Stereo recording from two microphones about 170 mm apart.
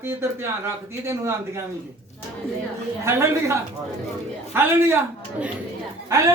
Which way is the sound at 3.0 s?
15° right (ahead or behind).